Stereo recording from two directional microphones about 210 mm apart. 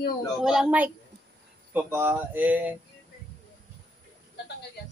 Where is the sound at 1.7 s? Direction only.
10° right (ahead or behind).